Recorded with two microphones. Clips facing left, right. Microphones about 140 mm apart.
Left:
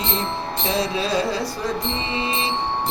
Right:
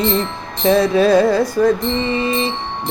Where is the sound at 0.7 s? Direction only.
50° right (ahead or behind).